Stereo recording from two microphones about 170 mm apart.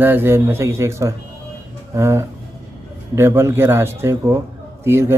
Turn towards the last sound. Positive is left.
turn(degrees=-15)  # may be behind; listen again after turning